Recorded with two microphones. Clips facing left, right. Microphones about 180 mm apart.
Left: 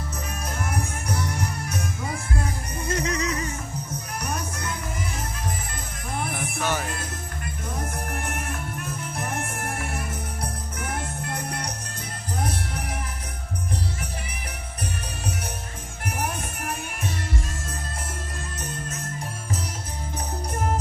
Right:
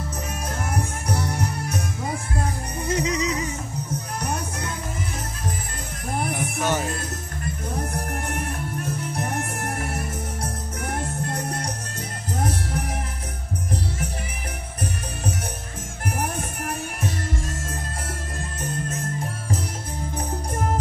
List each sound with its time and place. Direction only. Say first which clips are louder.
2.9 s music: right 2 dB; 15° right (ahead or behind)
6.6 s music: right 3 dB; 20° right (ahead or behind)
8.5 s music: right 3 dB; 35° right (ahead or behind)